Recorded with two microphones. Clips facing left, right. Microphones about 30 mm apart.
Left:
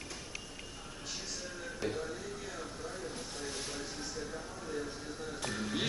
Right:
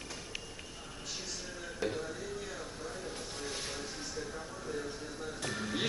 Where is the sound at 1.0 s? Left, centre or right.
Centre.